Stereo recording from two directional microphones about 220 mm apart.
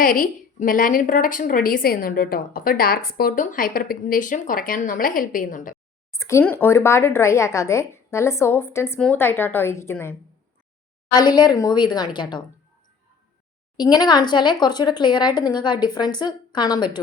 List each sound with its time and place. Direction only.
0.0 s a woman's voice: 40° left (ahead or behind)
6.1 s speech: 15° left (ahead or behind)
13.7 s speech: 20° left (ahead or behind)